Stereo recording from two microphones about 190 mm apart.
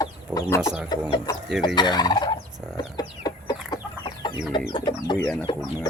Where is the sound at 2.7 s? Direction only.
20° left (ahead or behind).